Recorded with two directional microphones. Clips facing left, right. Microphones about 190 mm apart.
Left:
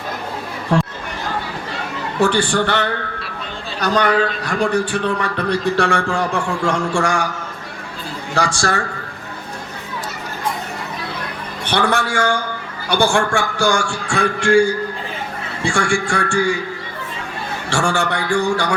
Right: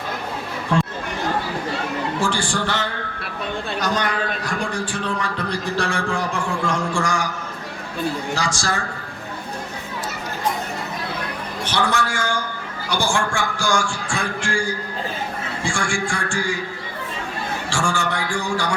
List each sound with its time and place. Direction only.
2.2 s a man's voice: 65° left (ahead or behind)
8.4 s a man's voice: 65° left (ahead or behind)
11.6 s a man's voice: 60° left (ahead or behind)
17.7 s a man's voice: 65° left (ahead or behind)